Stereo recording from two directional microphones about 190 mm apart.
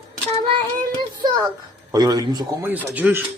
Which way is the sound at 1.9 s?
20° right (ahead or behind).